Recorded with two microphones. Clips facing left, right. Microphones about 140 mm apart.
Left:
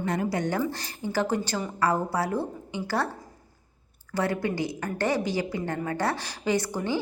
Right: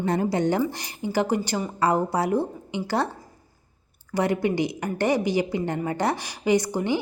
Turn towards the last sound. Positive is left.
turn(degrees=-15)  # may be behind; listen again after turning